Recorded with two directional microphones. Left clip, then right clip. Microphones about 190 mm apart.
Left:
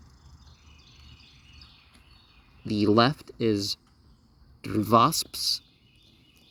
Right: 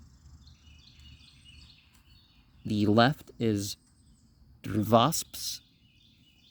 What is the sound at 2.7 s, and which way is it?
Speech, 30° right (ahead or behind).